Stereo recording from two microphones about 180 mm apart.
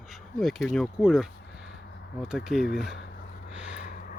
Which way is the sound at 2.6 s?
60° left (ahead or behind).